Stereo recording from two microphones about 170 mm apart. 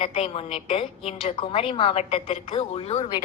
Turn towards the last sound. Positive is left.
turn(degrees=35)  # may be behind; listen again after turning